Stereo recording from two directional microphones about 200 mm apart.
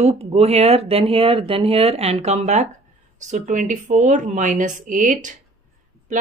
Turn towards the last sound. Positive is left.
turn(degrees=-40)  # may be behind; listen again after turning